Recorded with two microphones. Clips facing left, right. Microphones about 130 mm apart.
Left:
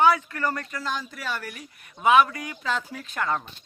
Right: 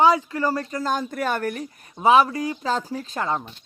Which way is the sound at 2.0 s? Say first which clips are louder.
Right 2 dB; 30° right (ahead or behind).